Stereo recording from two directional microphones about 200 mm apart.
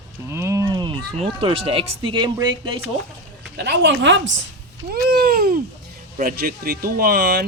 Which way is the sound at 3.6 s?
60° right (ahead or behind).